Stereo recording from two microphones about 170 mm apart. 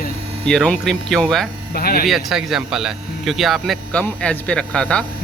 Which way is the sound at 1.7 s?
65° left (ahead or behind).